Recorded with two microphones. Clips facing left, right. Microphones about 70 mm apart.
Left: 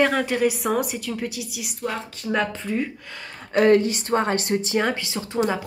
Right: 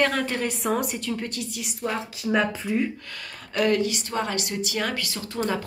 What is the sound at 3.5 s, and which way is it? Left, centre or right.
A woman's voice, left.